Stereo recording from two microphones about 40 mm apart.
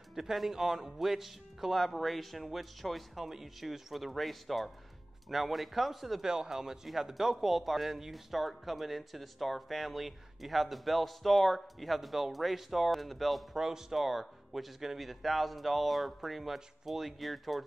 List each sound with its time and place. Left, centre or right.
0.1 s speech: centre
6.2 s speech: centre
13.6 s speech: centre